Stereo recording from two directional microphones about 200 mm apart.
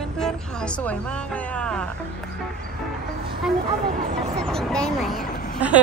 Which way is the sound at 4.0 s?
35° right (ahead or behind).